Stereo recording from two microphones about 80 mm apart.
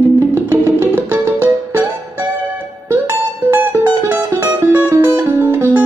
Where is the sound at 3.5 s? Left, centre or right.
Right.